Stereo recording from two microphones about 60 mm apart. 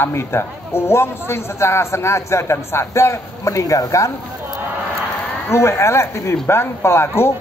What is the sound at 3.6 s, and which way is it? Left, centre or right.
Speech, left.